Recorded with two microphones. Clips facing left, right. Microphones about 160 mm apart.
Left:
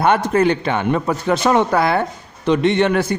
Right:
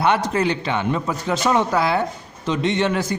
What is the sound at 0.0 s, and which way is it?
A man's voice, 50° left (ahead or behind).